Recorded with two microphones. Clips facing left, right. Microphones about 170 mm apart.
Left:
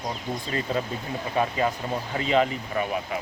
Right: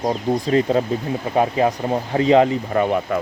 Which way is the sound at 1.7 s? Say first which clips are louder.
Right 9 dB; 50° right (ahead or behind).